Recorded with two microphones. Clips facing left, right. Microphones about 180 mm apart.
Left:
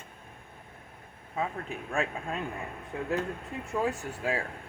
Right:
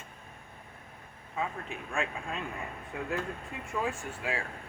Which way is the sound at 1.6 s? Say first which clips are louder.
Left 3 dB; 40° left (ahead or behind).